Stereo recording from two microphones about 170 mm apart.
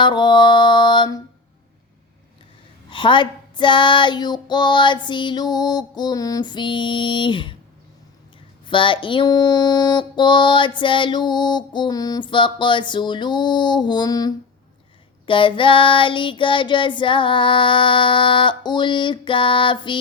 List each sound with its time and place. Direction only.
0.0 s mantra: 25° left (ahead or behind)
2.9 s child singing: 30° left (ahead or behind)
8.6 s child singing: 30° left (ahead or behind)